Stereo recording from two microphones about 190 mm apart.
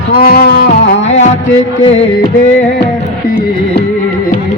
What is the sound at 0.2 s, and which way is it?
Music, 55° left (ahead or behind).